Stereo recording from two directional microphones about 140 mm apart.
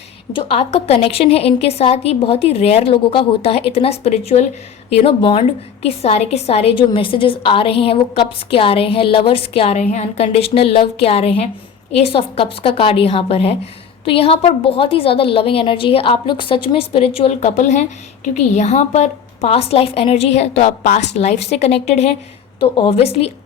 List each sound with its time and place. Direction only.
0.3 s a woman's voice: 40° left (ahead or behind)
20.8 s a woman's voice: 70° left (ahead or behind)
21.2 s a woman's voice: 50° left (ahead or behind)